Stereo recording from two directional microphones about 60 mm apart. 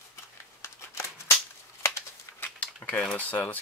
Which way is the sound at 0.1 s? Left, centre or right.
Left.